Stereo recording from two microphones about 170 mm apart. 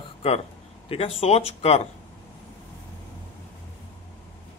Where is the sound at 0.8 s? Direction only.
35° left (ahead or behind).